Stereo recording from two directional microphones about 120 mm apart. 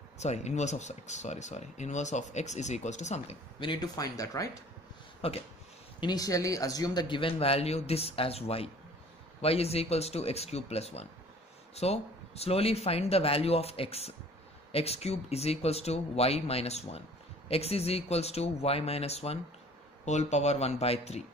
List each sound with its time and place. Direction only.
0.2 s speech: 70° left (ahead or behind)
3.5 s speech: 40° left (ahead or behind)
5.2 s speech: 50° left (ahead or behind)
5.9 s a man's voice: 35° left (ahead or behind); by 21.2 s 60° left (ahead or behind)